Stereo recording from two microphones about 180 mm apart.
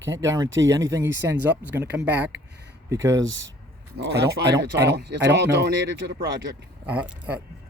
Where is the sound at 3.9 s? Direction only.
65° right (ahead or behind).